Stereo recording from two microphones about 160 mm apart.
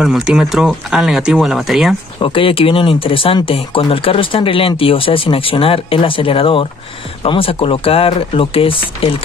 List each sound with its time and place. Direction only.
0.0 s speech: centre (ahead or behind)
2.2 s speech: 35° left (ahead or behind)